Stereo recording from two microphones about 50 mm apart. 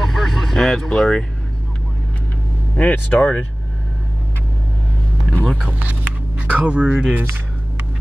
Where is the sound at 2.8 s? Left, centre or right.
Left.